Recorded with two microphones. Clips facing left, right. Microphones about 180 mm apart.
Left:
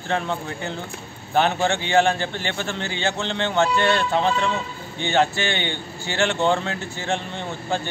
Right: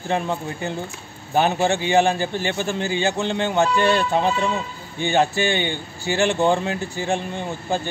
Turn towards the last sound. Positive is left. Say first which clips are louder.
# right 2 dB
turn(degrees=-15)  # may be behind; listen again after turning